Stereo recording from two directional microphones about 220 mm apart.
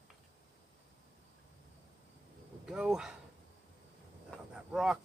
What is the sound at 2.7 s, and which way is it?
Speech, 5° right (ahead or behind).